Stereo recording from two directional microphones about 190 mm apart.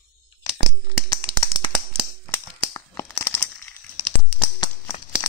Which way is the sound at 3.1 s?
15° left (ahead or behind).